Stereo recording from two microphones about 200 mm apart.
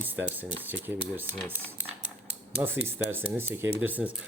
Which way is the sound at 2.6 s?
10° right (ahead or behind).